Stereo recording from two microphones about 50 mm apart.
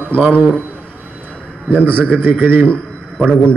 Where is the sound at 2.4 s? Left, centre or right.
Right.